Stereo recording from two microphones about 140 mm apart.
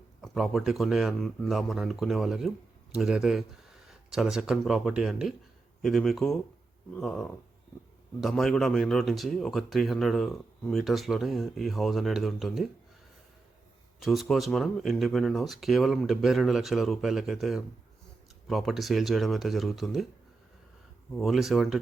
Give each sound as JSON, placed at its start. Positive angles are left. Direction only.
{"t": 0.2, "sound": "speech", "side_deg": 0}
{"t": 14.0, "sound": "speech", "side_deg": 0}
{"t": 21.2, "sound": "speech", "side_deg": 0}